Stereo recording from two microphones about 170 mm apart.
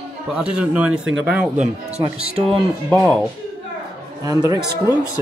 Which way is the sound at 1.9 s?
35° right (ahead or behind).